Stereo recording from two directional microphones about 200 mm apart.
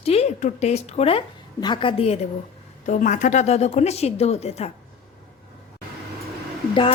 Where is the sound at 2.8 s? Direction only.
40° left (ahead or behind).